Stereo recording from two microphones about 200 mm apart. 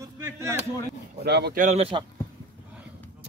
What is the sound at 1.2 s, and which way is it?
Speech, 55° right (ahead or behind).